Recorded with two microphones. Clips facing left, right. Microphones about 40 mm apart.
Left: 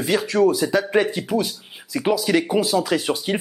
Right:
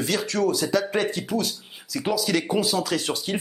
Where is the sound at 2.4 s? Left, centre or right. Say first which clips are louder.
Left 4 dB; centre.